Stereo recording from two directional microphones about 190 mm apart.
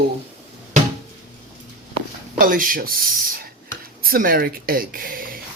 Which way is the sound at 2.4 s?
45° right (ahead or behind).